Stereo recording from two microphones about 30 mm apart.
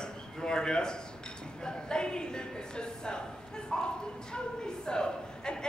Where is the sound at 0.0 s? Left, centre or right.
Left.